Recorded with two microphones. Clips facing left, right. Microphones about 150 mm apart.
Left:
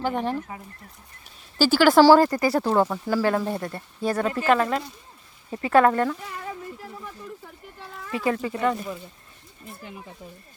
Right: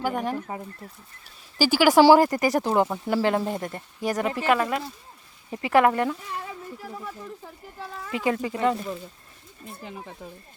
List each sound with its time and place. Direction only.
0.0 s speech: 10° right (ahead or behind)
1.5 s speech: 10° right (ahead or behind)
8.1 s speech: 20° right (ahead or behind)